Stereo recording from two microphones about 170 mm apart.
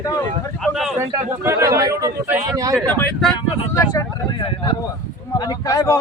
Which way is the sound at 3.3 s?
25° left (ahead or behind).